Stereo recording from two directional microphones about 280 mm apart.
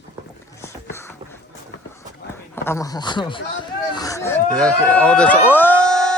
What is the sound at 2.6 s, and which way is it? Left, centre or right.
Speech, centre.